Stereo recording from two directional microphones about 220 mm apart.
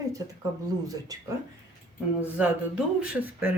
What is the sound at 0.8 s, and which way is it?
Speech, 15° right (ahead or behind).